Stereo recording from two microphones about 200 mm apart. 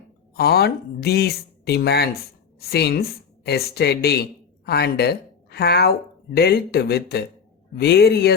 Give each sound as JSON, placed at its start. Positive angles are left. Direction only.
{"t": 0.3, "sound": "a woman's voice", "side_deg": 50}